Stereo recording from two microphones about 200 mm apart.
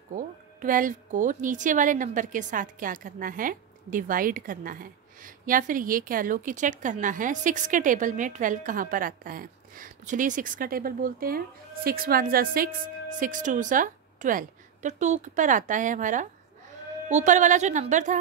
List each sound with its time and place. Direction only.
0.1 s a woman's voice: 40° right (ahead or behind)